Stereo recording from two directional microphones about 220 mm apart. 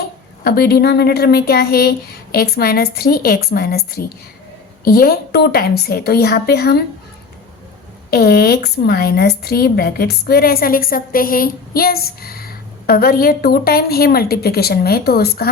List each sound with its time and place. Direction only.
0.4 s a woman's voice: 45° left (ahead or behind)
8.1 s a woman's voice: 45° left (ahead or behind)